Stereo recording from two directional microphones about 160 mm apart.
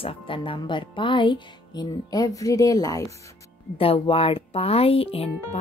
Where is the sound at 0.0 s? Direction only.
30° left (ahead or behind).